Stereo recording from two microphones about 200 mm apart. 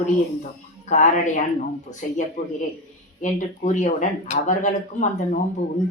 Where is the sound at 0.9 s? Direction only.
40° left (ahead or behind).